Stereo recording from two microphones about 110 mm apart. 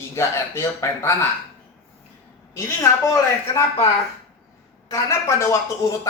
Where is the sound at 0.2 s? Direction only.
25° left (ahead or behind).